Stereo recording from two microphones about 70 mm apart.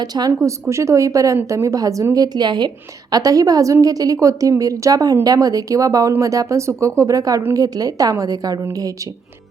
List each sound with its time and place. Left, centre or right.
0.4 s speech: right
2.1 s a woman's voice: right
3.1 s a woman's voice: right